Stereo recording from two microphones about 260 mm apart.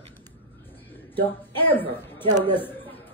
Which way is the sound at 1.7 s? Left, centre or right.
Centre.